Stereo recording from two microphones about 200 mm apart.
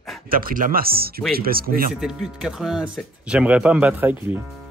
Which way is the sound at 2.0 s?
5° right (ahead or behind).